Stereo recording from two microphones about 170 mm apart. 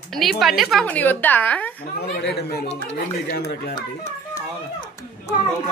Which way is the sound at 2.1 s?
75° left (ahead or behind).